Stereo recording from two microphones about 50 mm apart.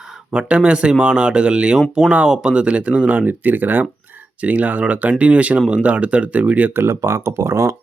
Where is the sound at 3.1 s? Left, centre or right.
Right.